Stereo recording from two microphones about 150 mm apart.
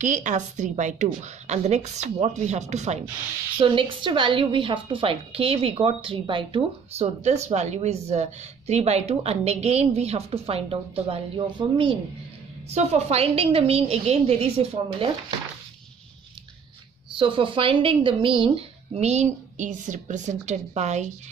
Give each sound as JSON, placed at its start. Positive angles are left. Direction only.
{"t": 0.0, "sound": "speech", "side_deg": -55}
{"t": 3.5, "sound": "a woman's voice", "side_deg": -35}
{"t": 12.6, "sound": "speech", "side_deg": -45}
{"t": 17.2, "sound": "speech", "side_deg": -35}